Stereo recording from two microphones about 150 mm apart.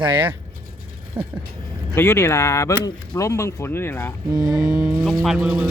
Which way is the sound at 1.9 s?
15° left (ahead or behind).